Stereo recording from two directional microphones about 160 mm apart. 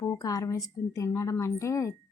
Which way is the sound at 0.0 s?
20° left (ahead or behind).